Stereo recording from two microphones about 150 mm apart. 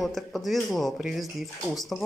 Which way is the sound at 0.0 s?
Centre (ahead or behind).